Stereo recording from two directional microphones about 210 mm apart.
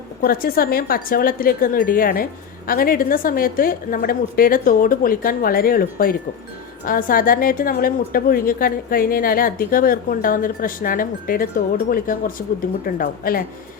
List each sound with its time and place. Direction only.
0.2 s a woman's voice: 45° left (ahead or behind)